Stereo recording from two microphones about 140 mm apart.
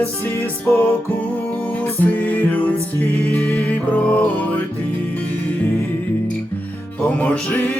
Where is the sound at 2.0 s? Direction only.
10° left (ahead or behind).